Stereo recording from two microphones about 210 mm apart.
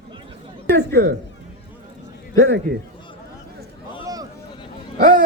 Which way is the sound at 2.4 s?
55° right (ahead or behind).